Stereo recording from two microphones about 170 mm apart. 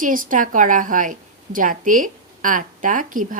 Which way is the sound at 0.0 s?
55° right (ahead or behind).